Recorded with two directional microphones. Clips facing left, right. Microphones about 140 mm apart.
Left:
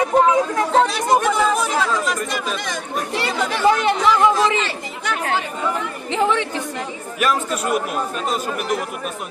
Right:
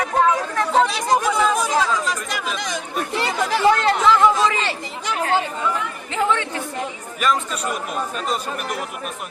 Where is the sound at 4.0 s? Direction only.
20° left (ahead or behind).